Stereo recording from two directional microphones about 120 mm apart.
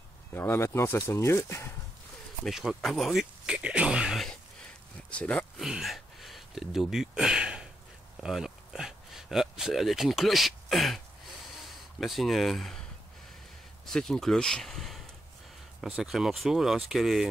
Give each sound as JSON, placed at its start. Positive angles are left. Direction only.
{"t": 0.3, "sound": "speech", "side_deg": 20}
{"t": 2.4, "sound": "speech", "side_deg": 0}
{"t": 5.1, "sound": "speech", "side_deg": 10}
{"t": 5.6, "sound": "speech", "side_deg": -5}
{"t": 13.8, "sound": "speech", "side_deg": 5}